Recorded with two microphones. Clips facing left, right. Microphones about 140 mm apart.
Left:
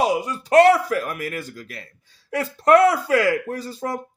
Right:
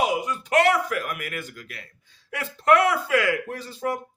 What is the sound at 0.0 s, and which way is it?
Speech, 35° left (ahead or behind).